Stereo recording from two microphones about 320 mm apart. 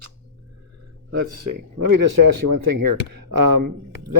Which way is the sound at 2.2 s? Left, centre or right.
Right.